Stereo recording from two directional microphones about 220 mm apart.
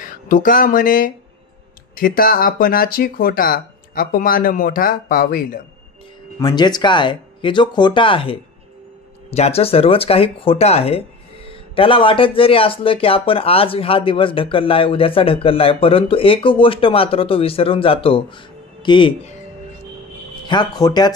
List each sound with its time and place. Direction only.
0.0 s speech: 40° left (ahead or behind)
6.4 s speech: 20° left (ahead or behind)
20.4 s speech: 20° left (ahead or behind)